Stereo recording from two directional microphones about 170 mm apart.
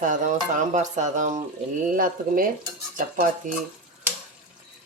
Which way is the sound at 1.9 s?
55° right (ahead or behind).